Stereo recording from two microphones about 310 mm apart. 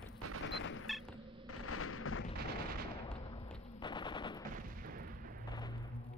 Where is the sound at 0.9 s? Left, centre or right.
Centre.